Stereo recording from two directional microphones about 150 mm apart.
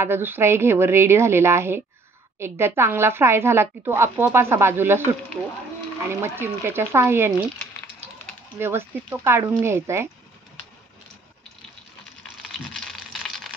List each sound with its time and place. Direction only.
0.0 s a woman's voice: 15° right (ahead or behind)
6.0 s a woman's voice: 15° right (ahead or behind)
8.5 s a woman's voice: 15° right (ahead or behind)
12.4 s a sound: centre (ahead or behind)